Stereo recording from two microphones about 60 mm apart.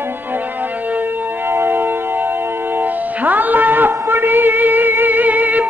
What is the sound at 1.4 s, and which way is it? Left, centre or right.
Music, right.